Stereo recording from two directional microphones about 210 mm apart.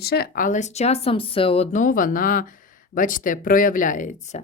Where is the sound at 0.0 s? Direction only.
50° left (ahead or behind).